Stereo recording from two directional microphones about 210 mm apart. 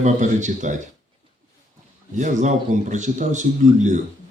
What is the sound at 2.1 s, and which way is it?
A man's voice, 35° right (ahead or behind).